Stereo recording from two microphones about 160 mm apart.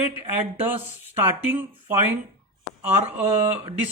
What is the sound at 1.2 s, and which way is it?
Speech, 15° right (ahead or behind).